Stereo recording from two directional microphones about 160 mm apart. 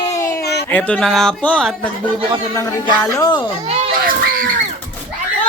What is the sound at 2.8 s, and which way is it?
Speech, 25° left (ahead or behind).